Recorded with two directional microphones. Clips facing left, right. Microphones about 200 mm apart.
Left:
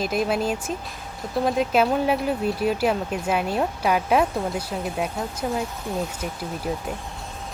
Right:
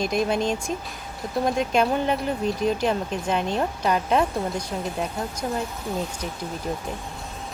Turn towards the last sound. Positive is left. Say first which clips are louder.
# left 1 dB
turn(degrees=5)  # may be behind; listen again after turning